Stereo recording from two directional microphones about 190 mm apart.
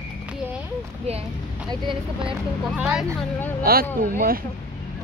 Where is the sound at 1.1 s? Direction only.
35° right (ahead or behind).